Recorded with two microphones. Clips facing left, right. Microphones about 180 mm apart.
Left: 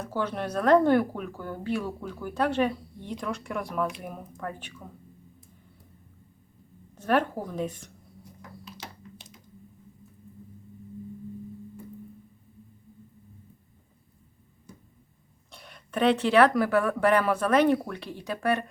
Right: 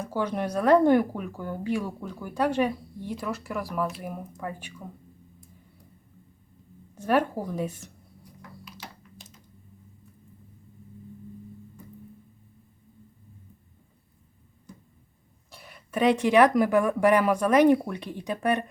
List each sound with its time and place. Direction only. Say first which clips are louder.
0.0 s speech: right 2 dB; 15° right (ahead or behind)
6.9 s speech: right 1 dB; 10° right (ahead or behind)
15.5 s speech: right 1 dB; 5° right (ahead or behind)